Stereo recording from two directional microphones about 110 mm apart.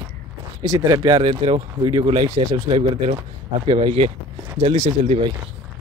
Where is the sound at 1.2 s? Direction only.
55° right (ahead or behind).